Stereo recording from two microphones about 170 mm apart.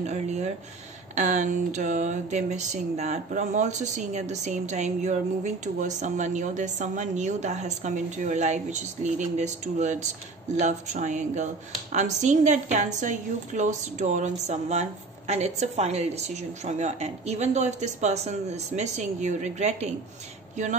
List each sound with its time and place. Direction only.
0.0 s speech: 40° right (ahead or behind)